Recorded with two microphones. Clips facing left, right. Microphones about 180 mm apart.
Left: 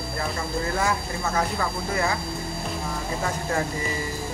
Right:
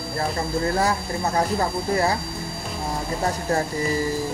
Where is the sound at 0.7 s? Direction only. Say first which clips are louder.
Right 3 dB; 35° right (ahead or behind).